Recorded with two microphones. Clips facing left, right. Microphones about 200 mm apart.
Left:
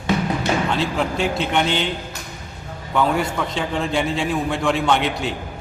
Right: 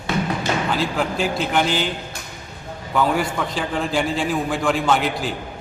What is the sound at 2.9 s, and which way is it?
A man's voice, centre (ahead or behind).